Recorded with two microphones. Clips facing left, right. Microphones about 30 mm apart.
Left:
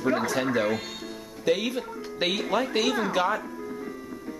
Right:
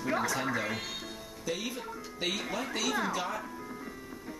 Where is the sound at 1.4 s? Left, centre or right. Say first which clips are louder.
Left 10 dB; left.